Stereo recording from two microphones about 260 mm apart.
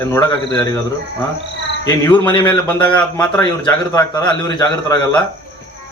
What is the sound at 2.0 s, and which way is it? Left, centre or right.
A man's voice, centre.